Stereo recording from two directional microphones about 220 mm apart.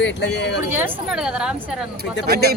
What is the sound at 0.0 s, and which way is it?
Speech, 50° left (ahead or behind).